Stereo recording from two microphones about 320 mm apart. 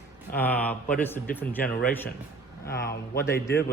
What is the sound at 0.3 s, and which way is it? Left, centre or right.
Speech, centre.